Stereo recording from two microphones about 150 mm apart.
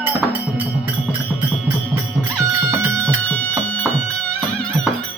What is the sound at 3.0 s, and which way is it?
Music, 10° left (ahead or behind).